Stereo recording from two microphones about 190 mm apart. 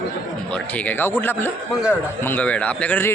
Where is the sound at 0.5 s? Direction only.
10° left (ahead or behind).